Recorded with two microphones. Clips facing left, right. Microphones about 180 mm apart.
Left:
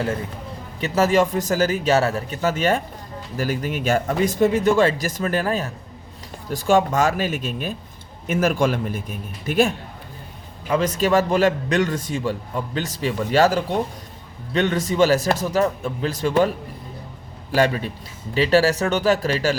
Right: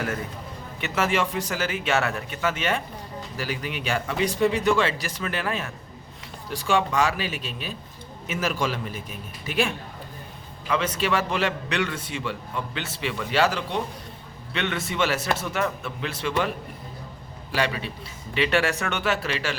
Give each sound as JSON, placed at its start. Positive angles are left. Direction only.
{"t": 0.8, "sound": "a man's voice", "side_deg": 40}
{"t": 17.5, "sound": "a man's voice", "side_deg": 45}